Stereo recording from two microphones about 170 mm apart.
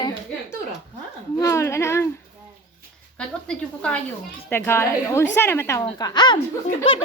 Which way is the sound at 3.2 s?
5° left (ahead or behind).